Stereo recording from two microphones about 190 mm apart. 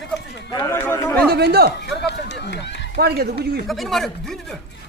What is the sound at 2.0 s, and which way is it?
Run, 65° left (ahead or behind).